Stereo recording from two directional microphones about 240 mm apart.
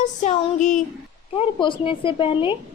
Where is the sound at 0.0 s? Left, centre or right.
Left.